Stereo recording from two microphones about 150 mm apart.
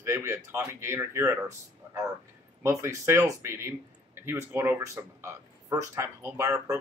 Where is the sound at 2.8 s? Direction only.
20° right (ahead or behind).